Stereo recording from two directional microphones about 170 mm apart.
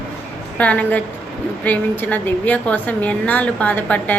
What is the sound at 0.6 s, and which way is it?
A woman's voice, 10° left (ahead or behind).